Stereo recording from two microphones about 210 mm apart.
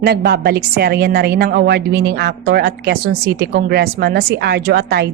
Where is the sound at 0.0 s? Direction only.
50° right (ahead or behind).